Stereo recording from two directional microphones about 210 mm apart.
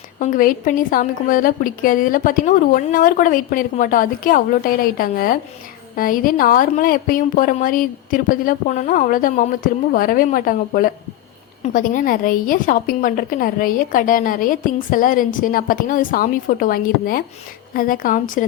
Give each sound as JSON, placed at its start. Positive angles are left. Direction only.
{"t": 0.2, "sound": "a woman's voice", "side_deg": 40}